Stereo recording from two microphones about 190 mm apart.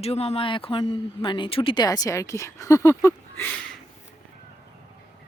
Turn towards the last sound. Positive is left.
turn(degrees=10)  # may be behind; listen again after turning